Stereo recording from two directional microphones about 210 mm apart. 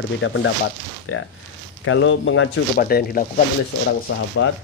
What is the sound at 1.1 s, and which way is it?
Speech, 75° left (ahead or behind).